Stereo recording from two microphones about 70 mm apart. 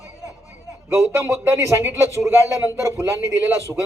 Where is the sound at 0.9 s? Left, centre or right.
Right.